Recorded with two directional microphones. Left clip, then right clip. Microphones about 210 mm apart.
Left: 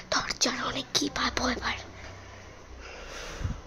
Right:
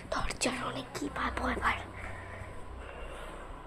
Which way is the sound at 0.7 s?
20° left (ahead or behind).